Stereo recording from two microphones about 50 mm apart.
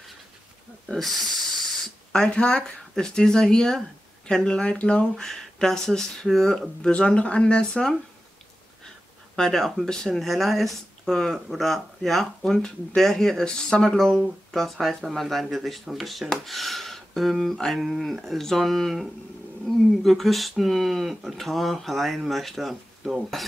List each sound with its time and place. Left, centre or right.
0.8 s speech: centre
2.1 s speech: centre
5.1 s speech: centre
6.8 s speech: left
9.4 s speech: centre